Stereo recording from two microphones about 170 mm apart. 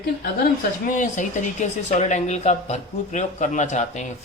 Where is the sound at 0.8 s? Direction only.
50° left (ahead or behind).